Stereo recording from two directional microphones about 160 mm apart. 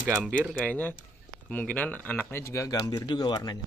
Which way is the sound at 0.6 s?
10° left (ahead or behind).